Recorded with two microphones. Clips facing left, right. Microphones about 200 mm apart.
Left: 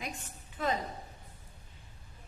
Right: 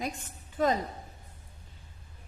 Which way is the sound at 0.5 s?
40° right (ahead or behind).